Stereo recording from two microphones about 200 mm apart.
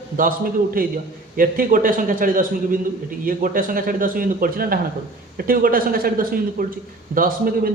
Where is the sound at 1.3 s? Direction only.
45° right (ahead or behind).